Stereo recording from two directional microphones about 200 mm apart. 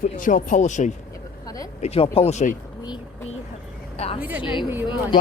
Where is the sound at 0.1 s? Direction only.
40° left (ahead or behind).